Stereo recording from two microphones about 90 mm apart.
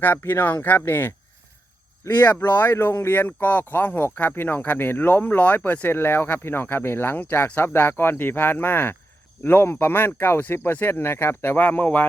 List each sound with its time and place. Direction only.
0.0 s speech: 20° left (ahead or behind)